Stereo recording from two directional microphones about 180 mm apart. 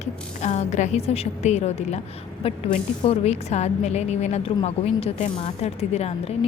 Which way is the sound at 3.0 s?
35° left (ahead or behind).